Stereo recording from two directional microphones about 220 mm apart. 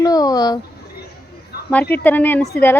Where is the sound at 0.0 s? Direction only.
15° left (ahead or behind).